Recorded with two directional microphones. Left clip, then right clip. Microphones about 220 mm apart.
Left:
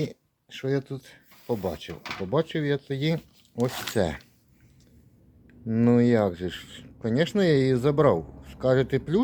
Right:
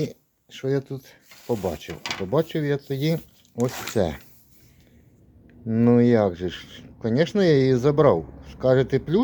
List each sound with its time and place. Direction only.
0.0 s speech: centre (ahead or behind)
5.5 s speech: centre (ahead or behind)